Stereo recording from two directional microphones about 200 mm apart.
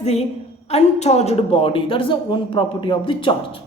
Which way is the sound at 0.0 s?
30° left (ahead or behind).